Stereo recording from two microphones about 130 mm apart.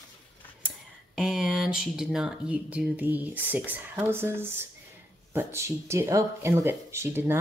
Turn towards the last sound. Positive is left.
turn(degrees=-20)  # may be behind; listen again after turning